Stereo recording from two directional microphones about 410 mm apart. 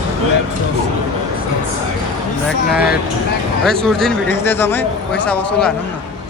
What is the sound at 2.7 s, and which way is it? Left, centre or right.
Speech, left.